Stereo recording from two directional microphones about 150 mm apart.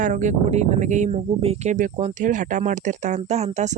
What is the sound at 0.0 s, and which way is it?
Speech, 55° right (ahead or behind).